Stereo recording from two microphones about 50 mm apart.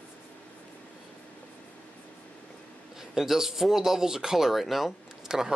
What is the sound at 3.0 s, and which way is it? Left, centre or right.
Speech, centre.